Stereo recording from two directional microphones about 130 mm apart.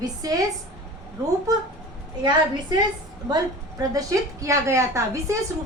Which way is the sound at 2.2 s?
35° right (ahead or behind).